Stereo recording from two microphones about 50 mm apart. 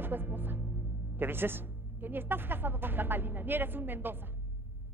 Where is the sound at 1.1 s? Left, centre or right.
Right.